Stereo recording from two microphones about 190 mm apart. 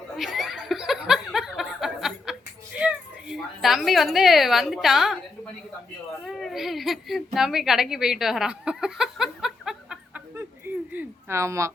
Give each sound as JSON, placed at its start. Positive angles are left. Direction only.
{"t": 0.2, "sound": "laughter", "side_deg": 0}
{"t": 2.7, "sound": "a woman's voice", "side_deg": -5}
{"t": 6.2, "sound": "speech", "side_deg": 0}
{"t": 7.3, "sound": "a sound", "side_deg": 0}